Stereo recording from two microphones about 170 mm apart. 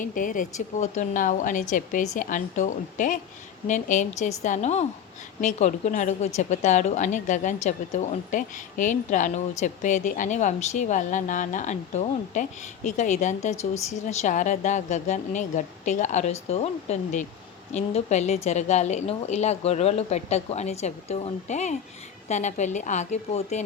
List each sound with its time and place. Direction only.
0.0 s a woman's voice: 50° left (ahead or behind)